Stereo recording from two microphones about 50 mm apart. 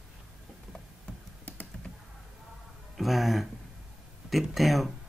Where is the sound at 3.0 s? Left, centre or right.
Centre.